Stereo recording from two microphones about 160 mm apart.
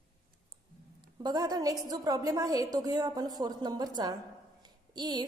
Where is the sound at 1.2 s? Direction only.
25° right (ahead or behind).